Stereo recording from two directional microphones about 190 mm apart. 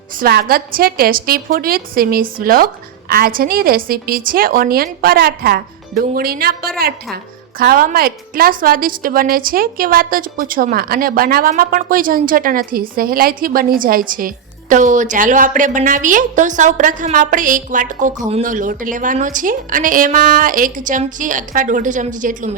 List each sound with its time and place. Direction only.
0.2 s a woman's voice: 50° right (ahead or behind)